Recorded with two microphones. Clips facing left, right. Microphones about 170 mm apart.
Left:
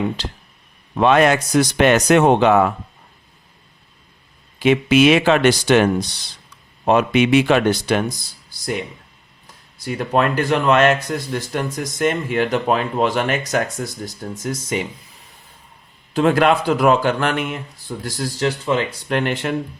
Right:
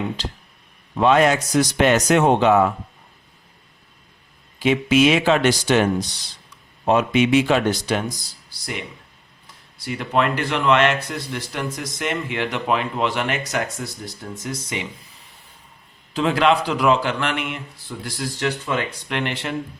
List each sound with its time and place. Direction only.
0.9 s a man's voice: 65° left (ahead or behind)
4.6 s a man's voice: 65° left (ahead or behind)
9.8 s speech: 45° left (ahead or behind)
16.1 s speech: 50° left (ahead or behind)